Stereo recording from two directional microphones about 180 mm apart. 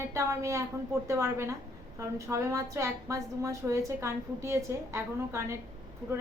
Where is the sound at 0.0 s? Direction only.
15° right (ahead or behind).